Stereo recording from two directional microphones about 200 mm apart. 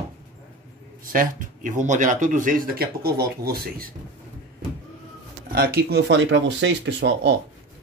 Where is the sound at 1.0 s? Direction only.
45° right (ahead or behind).